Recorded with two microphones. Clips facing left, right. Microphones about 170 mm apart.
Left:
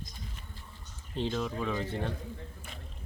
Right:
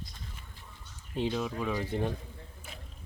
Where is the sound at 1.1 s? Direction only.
10° right (ahead or behind).